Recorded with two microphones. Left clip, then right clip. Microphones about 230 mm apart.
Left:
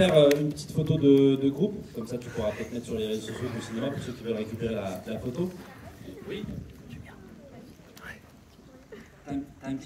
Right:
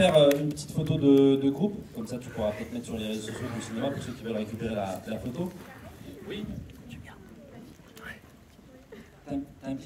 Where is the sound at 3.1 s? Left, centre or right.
Right.